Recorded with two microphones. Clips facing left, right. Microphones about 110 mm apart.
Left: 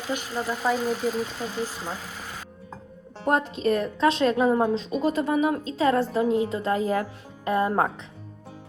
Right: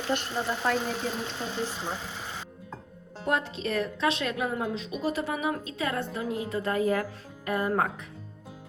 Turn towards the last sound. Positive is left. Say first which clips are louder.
# left 4 dB
turn(degrees=25)  # may be behind; listen again after turning